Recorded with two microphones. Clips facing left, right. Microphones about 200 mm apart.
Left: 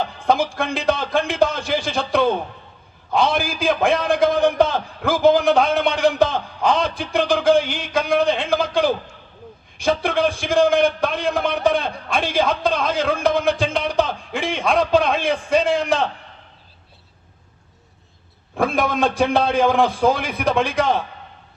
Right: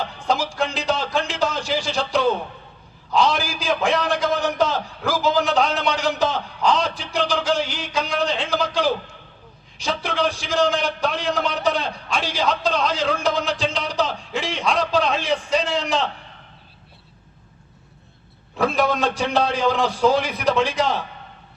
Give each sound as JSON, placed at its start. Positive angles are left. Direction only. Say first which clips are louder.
{"t": 0.2, "sound": "a sound", "louder": "left 3 dB", "side_deg": 55}
{"t": 3.1, "sound": "a man's voice", "louder": "left 1 dB", "side_deg": 55}
{"t": 18.5, "sound": "a man's voice", "louder": "even", "side_deg": 55}